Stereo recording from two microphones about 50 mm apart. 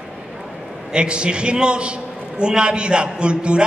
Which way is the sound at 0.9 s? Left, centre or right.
Centre.